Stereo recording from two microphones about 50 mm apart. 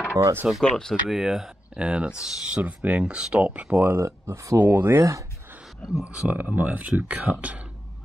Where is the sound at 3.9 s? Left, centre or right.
Right.